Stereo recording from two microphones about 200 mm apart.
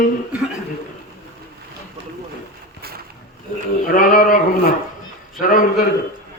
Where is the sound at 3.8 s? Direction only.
45° left (ahead or behind).